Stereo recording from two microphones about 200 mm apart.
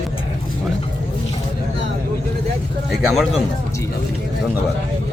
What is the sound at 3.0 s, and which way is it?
Speech, centre (ahead or behind).